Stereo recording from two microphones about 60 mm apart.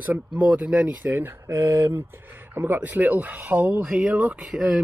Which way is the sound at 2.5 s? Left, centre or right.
Right.